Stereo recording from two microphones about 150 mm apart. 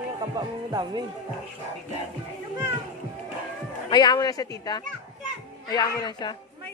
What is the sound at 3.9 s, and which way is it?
Speech, 30° left (ahead or behind).